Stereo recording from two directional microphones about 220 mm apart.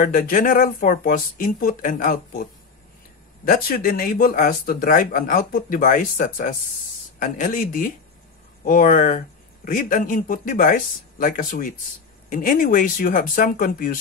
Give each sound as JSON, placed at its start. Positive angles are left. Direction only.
{"t": 0.0, "sound": "speech", "side_deg": 40}
{"t": 3.4, "sound": "speech", "side_deg": 40}